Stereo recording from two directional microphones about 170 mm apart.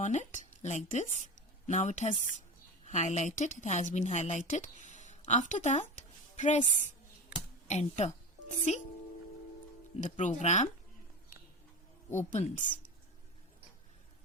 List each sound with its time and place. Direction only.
0.0 s a woman's voice: 45° left (ahead or behind)
10.0 s speech: 45° left (ahead or behind)
12.1 s speech: 45° left (ahead or behind)